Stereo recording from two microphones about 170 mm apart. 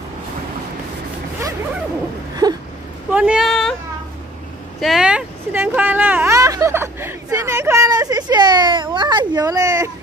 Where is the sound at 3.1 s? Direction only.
5° right (ahead or behind).